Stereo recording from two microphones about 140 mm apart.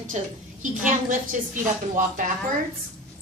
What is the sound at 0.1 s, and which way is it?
Speech, 55° right (ahead or behind).